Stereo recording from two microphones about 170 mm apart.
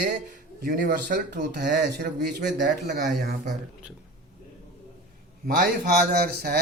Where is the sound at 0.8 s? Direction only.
75° right (ahead or behind).